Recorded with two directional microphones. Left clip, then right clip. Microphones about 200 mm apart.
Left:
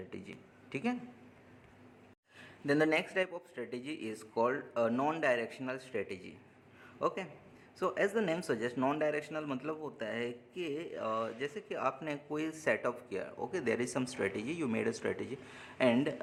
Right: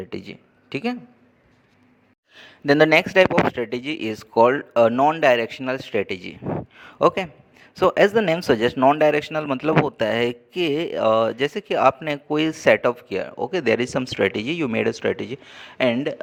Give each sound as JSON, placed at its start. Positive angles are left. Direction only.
{"t": 0.1, "sound": "speech", "side_deg": -40}
{"t": 2.3, "sound": "a man's voice", "side_deg": -45}
{"t": 6.7, "sound": "a sound", "side_deg": -45}
{"t": 7.8, "sound": "a man's voice", "side_deg": -45}